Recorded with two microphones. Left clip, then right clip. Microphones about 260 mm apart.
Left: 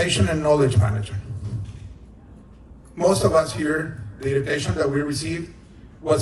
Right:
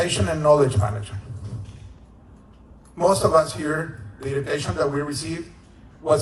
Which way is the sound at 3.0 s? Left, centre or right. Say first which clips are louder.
Right 1 dB; centre.